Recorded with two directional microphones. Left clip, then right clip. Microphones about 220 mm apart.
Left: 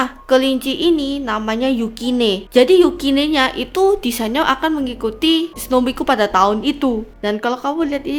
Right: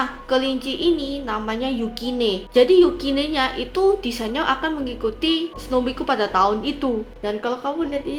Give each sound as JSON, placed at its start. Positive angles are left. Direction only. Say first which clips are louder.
{"t": 0.0, "sound": "a woman's voice", "louder": "left 6 dB", "side_deg": 35}